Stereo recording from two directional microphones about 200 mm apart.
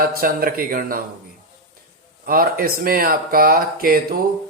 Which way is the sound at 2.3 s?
45° right (ahead or behind).